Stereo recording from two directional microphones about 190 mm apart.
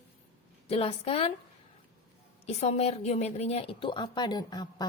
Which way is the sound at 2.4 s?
35° left (ahead or behind).